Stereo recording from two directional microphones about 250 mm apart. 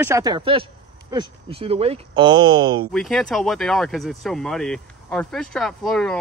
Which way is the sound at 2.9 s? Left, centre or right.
Centre.